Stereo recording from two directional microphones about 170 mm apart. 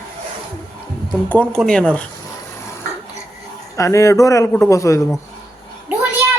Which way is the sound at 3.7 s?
15° left (ahead or behind).